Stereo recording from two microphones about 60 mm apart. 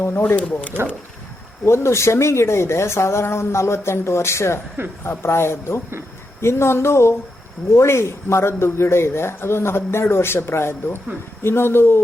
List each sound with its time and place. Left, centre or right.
0.0 s speech: left
1.6 s a man's voice: left